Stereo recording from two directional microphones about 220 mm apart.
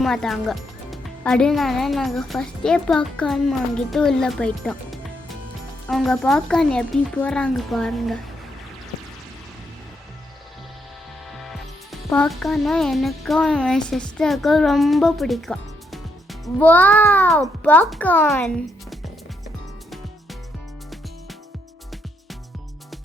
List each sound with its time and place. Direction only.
0.0 s speech: centre (ahead or behind)
11.3 s a child's voice: centre (ahead or behind)